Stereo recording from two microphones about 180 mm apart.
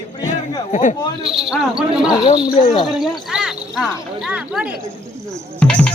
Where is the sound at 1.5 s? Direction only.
5° right (ahead or behind).